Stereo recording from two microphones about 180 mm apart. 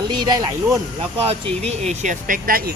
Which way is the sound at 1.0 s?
30° right (ahead or behind).